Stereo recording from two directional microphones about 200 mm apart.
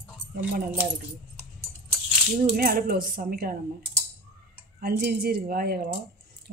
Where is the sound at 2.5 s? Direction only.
45° right (ahead or behind).